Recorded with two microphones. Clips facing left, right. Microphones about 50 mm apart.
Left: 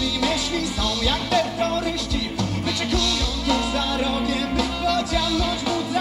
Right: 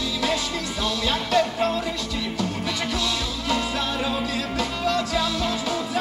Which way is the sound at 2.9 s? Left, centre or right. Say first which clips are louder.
Left 2 dB; centre.